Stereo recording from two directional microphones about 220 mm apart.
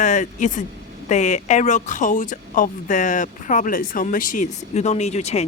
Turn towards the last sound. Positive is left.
turn(degrees=30)  # may be behind; listen again after turning